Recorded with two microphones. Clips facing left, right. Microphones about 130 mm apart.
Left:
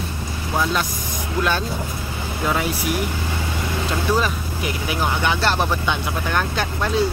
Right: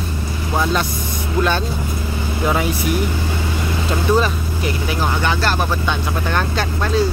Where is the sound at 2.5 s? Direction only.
5° left (ahead or behind).